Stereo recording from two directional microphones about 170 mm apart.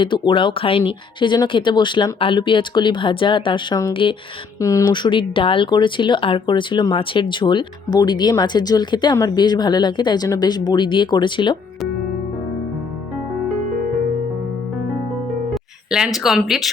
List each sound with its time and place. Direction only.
0.0 s speech: 30° left (ahead or behind)
15.9 s speech: centre (ahead or behind)